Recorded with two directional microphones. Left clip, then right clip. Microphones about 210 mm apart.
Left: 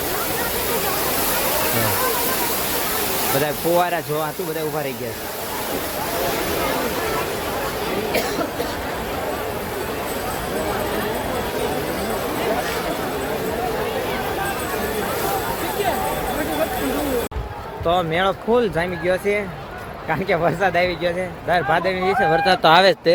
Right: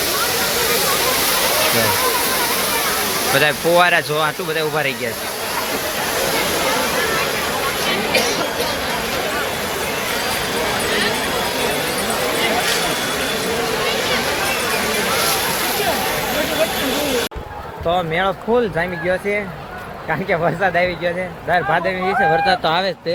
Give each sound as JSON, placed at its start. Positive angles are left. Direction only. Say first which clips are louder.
{"t": 3.4, "sound": "speech", "louder": "right 6 dB", "side_deg": 5}
{"t": 17.8, "sound": "speech", "louder": "right 1 dB", "side_deg": 20}
{"t": 22.4, "sound": "speech", "louder": "left 3 dB", "side_deg": 55}